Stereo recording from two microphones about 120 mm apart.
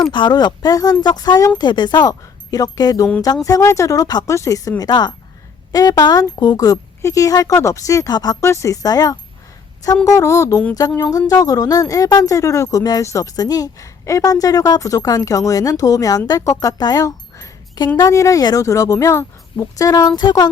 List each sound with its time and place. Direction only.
0.1 s speech: 40° left (ahead or behind)